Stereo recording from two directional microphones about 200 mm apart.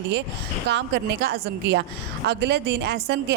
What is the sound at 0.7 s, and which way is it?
Speech, 60° right (ahead or behind).